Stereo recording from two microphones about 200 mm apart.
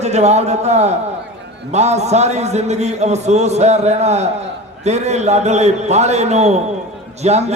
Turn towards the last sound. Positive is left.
turn(degrees=-35)  # may be behind; listen again after turning